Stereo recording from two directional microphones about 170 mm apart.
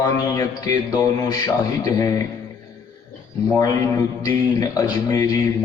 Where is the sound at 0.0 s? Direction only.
20° left (ahead or behind).